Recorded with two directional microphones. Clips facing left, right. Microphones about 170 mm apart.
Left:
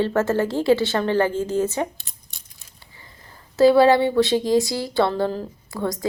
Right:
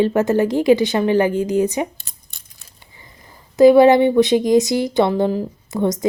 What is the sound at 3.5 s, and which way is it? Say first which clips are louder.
Speech: right 5 dB; 15° right (ahead or behind).